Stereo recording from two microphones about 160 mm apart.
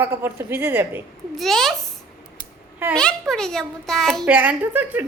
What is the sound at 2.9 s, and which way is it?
A woman's voice, 5° left (ahead or behind).